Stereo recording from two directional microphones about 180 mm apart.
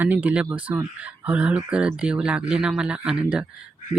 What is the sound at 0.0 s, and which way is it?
Speech, 10° right (ahead or behind).